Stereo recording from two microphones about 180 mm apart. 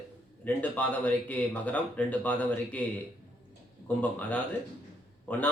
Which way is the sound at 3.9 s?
10° left (ahead or behind).